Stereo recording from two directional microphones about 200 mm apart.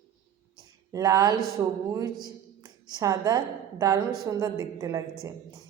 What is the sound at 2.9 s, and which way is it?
A woman's voice, 20° right (ahead or behind).